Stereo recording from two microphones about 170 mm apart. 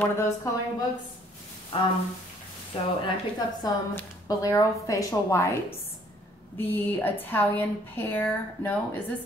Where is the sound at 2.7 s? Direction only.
30° left (ahead or behind).